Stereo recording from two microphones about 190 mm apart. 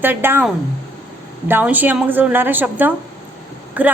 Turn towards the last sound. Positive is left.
turn(degrees=-10)  # may be behind; listen again after turning